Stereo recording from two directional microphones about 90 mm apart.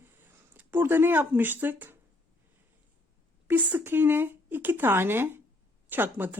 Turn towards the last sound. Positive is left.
turn(degrees=-20)  # may be behind; listen again after turning